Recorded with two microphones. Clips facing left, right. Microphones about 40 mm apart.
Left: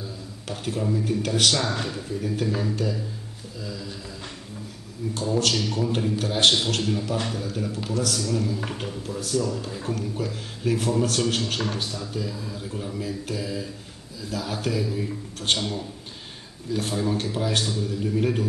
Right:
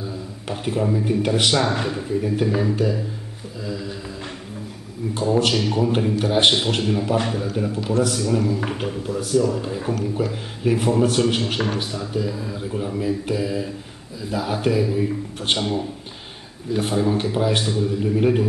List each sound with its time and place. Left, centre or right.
0.5 s a man's voice: right
5.1 s a man's voice: right